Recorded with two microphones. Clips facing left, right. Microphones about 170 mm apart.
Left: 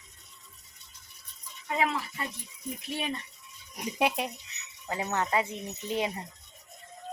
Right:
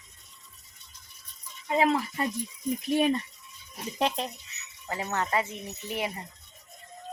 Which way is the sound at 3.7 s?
15° left (ahead or behind).